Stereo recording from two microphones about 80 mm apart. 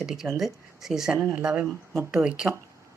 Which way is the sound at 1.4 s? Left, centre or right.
Centre.